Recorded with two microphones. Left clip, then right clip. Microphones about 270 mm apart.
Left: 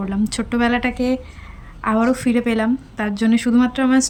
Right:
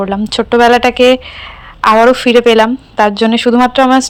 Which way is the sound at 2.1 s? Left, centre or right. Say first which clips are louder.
Right 13 dB; centre.